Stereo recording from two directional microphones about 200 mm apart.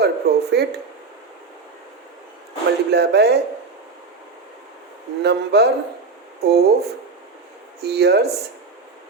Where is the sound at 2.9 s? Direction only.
55° right (ahead or behind).